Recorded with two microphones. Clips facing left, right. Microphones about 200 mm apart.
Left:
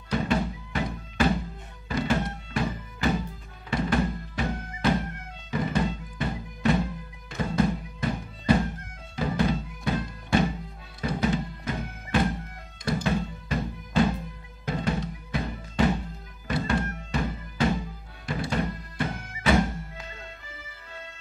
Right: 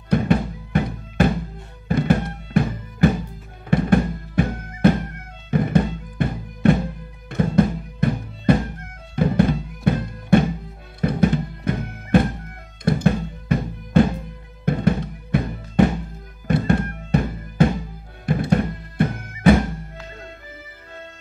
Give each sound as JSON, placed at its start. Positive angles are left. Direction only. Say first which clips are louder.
{"t": 0.1, "sound": "music", "louder": "right 6 dB", "side_deg": -55}